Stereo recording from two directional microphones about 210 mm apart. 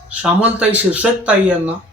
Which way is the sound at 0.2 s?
5° right (ahead or behind).